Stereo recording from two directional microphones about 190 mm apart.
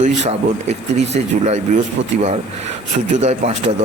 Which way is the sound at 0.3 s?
35° right (ahead or behind).